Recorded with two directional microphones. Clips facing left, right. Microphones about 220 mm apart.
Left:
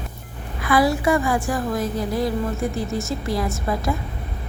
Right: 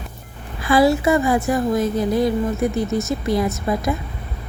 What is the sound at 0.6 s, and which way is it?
A woman's voice, 25° right (ahead or behind).